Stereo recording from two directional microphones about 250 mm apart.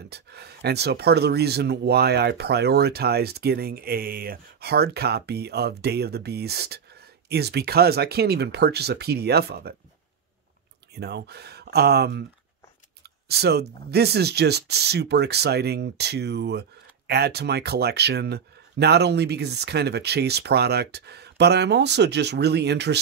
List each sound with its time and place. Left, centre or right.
0.1 s speech: right
11.0 s speech: right